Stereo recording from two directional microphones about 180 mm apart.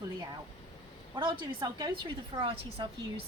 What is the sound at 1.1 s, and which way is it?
A woman's voice, 25° right (ahead or behind).